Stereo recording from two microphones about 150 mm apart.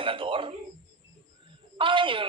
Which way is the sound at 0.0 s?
35° right (ahead or behind).